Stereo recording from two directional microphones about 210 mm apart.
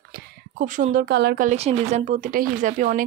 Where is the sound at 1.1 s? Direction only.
50° right (ahead or behind).